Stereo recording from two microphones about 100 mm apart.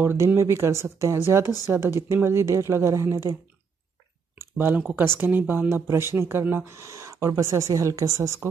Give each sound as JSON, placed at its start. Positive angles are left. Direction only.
{"t": 0.0, "sound": "speech", "side_deg": -25}
{"t": 4.4, "sound": "speech", "side_deg": -20}